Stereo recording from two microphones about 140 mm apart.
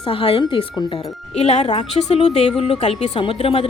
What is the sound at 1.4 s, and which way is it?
Speech, 50° left (ahead or behind).